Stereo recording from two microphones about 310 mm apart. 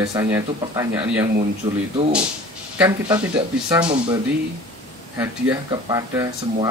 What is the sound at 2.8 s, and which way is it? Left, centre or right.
Speech, centre.